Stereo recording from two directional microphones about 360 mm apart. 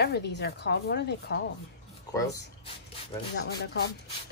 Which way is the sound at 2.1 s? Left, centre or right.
Centre.